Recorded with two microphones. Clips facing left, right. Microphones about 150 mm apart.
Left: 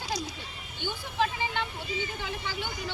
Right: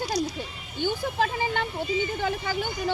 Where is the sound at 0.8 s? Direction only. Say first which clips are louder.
Right 5 dB; 45° right (ahead or behind).